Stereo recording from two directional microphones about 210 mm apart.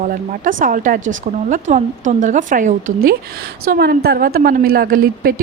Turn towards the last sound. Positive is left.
turn(degrees=-45)  # may be behind; listen again after turning